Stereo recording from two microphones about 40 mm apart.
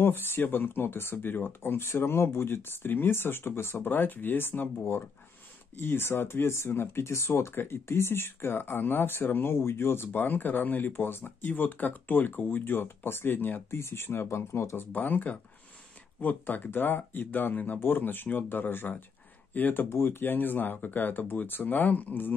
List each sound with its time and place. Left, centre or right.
0.0 s speech: left
3.8 s speech: left
10.2 s speech: left
11.0 s speech: left
11.4 s speech: left
14.9 s speech: left
19.5 s speech: left
19.9 s speech: left